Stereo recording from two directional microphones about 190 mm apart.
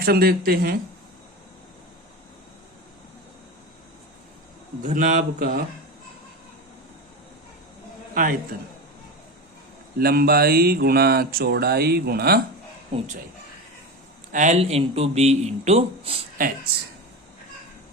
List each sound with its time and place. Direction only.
0.0 s speech: 55° right (ahead or behind)
4.8 s speech: 40° right (ahead or behind)
8.1 s a man's voice: 45° right (ahead or behind)
10.0 s speech: 55° right (ahead or behind)
14.3 s speech: 40° right (ahead or behind)